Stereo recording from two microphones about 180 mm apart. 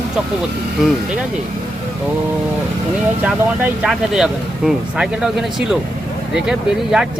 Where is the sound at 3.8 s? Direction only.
5° right (ahead or behind).